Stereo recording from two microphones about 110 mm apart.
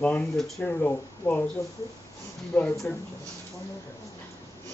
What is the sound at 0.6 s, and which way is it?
Speech, 15° left (ahead or behind).